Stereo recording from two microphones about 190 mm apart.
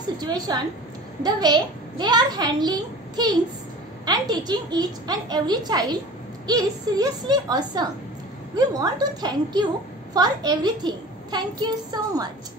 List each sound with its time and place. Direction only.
0.2 s a child's voice: 20° right (ahead or behind)